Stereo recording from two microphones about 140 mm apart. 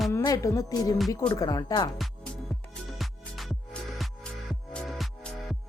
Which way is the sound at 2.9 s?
Centre (ahead or behind).